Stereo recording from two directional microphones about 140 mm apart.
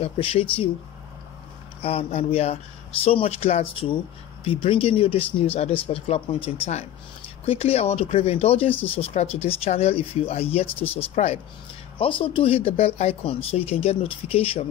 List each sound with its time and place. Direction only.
0.0 s speech: 40° left (ahead or behind)
1.8 s speech: 45° left (ahead or behind)